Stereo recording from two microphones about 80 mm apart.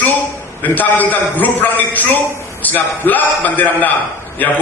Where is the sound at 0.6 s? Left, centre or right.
Left.